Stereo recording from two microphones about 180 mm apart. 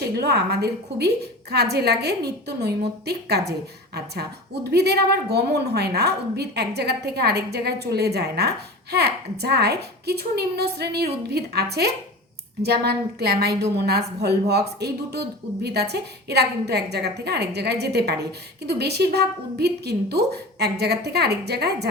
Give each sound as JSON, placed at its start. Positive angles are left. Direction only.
{"t": 0.0, "sound": "a woman's voice", "side_deg": -65}